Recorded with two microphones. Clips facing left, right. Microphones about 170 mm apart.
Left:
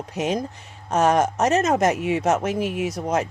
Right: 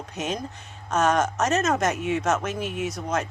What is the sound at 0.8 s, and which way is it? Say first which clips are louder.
Speech: left 3 dB; 30° left (ahead or behind).